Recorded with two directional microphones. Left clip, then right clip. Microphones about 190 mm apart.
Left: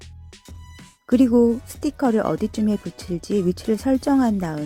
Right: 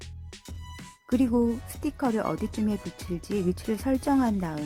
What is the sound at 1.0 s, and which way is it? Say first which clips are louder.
Speech: left 9 dB; 30° left (ahead or behind).